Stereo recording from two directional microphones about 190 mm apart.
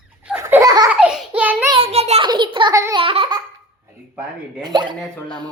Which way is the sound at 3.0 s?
30° right (ahead or behind).